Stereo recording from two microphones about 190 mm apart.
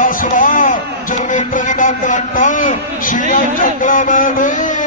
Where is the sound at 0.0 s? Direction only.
45° left (ahead or behind).